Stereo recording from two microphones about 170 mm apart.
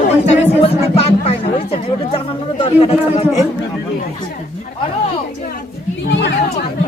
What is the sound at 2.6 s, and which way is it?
Speech, 35° left (ahead or behind).